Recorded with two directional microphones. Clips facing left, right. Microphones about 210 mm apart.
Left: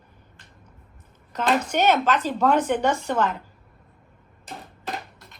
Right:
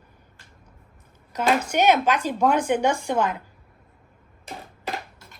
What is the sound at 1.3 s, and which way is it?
A woman's voice, 10° right (ahead or behind).